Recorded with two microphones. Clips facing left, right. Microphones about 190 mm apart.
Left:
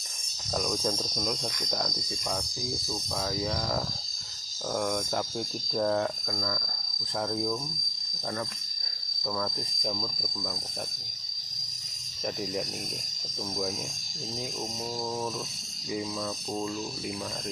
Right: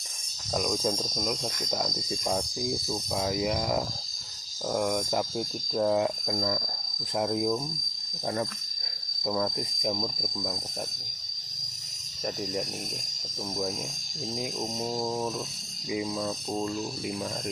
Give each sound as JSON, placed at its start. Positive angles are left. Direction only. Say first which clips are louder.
{"t": 0.5, "sound": "cricket", "louder": "right 2 dB", "side_deg": -5}
{"t": 2.9, "sound": "speech", "louder": "right 2 dB", "side_deg": -15}
{"t": 6.3, "sound": "cricket", "louder": "right 5 dB", "side_deg": -25}
{"t": 7.2, "sound": "speech", "louder": "right 4 dB", "side_deg": -15}
{"t": 9.2, "sound": "cricket", "louder": "right 4 dB", "side_deg": -25}
{"t": 12.2, "sound": "cricket", "louder": "even", "side_deg": 0}
{"t": 14.3, "sound": "speech", "louder": "right 3 dB", "side_deg": -15}
{"t": 16.6, "sound": "cricket", "louder": "right 2 dB", "side_deg": -5}